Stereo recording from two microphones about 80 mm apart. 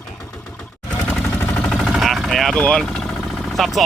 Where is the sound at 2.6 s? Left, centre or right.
Centre.